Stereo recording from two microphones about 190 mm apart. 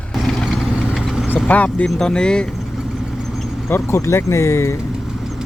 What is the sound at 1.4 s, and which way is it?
Speech, 5° left (ahead or behind).